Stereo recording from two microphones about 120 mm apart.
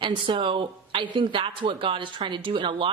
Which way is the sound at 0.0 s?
45° right (ahead or behind).